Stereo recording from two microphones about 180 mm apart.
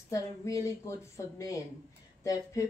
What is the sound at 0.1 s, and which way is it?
Speech, 15° left (ahead or behind).